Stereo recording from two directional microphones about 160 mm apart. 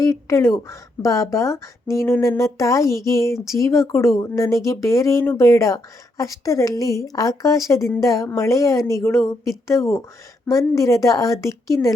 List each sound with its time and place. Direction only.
0.0 s speech: 20° left (ahead or behind)